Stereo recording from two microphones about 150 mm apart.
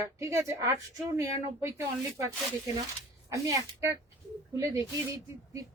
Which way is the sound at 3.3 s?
20° right (ahead or behind).